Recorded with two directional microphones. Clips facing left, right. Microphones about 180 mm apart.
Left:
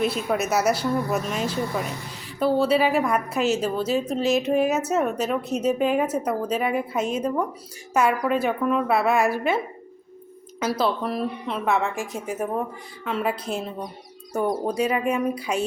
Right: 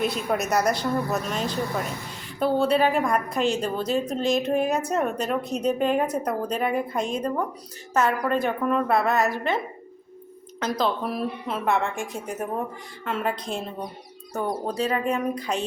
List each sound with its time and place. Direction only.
0.0 s a woman's voice: centre (ahead or behind)
10.6 s a woman's voice: 5° left (ahead or behind)